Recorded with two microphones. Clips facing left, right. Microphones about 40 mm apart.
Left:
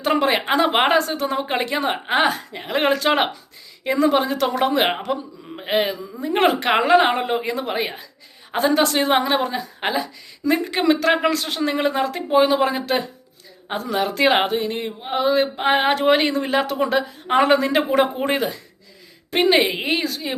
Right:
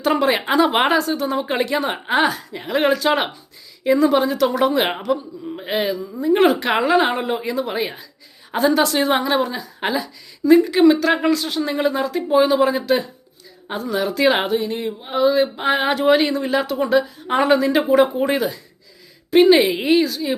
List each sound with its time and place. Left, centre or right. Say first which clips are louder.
0.0 s speech: right 1 dB; left
0.9 s speech: right 1 dB; left
1.7 s speech: even; left
2.2 s a woman's voice: even; left